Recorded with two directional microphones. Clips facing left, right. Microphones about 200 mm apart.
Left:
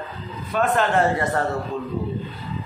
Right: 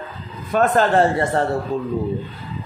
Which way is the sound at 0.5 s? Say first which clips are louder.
Right 4 dB; 35° right (ahead or behind).